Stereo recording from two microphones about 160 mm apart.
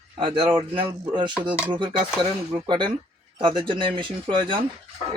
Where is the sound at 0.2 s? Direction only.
30° right (ahead or behind).